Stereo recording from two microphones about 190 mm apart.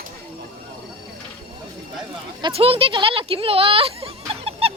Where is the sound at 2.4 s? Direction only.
30° right (ahead or behind).